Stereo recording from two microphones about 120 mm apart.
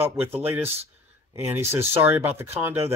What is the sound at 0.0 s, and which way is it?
Speech, 15° right (ahead or behind).